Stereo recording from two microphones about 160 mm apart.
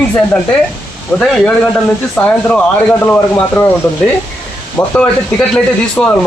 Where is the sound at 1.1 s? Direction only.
5° left (ahead or behind).